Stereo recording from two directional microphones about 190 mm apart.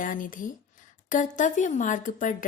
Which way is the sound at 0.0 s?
45° left (ahead or behind).